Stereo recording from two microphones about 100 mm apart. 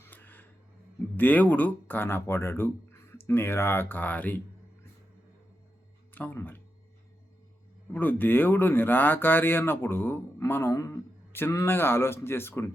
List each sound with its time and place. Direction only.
0.0 s a sound: 20° left (ahead or behind)
1.1 s speech: 20° left (ahead or behind)
6.1 s speech: 20° left (ahead or behind)
7.9 s speech: 20° left (ahead or behind)